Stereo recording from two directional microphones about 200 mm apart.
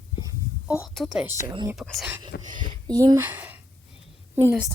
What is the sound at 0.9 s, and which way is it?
Speech, centre (ahead or behind).